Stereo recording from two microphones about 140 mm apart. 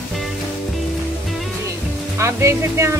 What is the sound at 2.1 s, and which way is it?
Speech, 20° right (ahead or behind).